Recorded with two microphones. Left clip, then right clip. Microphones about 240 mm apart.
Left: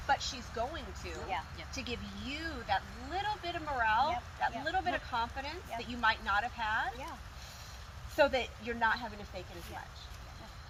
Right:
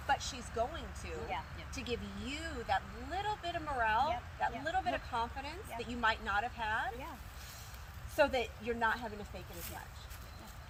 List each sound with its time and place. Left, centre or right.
0.1 s speech: centre
1.3 s speech: centre
1.7 s speech: centre
8.1 s speech: centre